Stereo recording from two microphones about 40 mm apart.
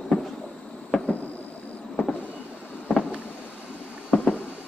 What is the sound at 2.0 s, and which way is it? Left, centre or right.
Vehicle, left.